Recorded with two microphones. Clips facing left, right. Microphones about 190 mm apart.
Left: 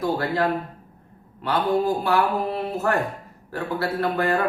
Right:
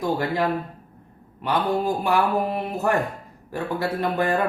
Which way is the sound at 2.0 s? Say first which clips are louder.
Even; 15° right (ahead or behind).